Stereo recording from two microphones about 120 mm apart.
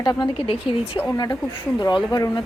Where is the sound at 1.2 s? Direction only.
35° left (ahead or behind).